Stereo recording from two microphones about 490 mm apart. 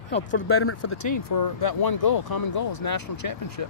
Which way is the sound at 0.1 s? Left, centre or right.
Left.